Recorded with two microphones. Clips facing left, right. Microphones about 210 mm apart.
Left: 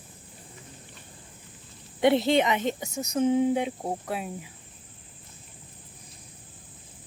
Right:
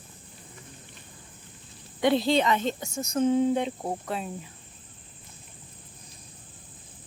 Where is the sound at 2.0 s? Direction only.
20° left (ahead or behind).